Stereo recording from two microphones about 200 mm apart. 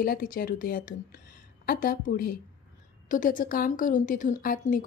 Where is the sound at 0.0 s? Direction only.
45° left (ahead or behind).